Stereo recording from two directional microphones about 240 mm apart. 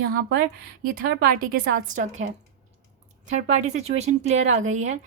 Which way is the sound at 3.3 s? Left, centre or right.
Right.